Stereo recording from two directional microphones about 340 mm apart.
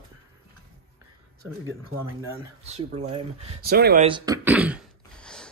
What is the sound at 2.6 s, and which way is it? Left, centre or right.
Speech, centre.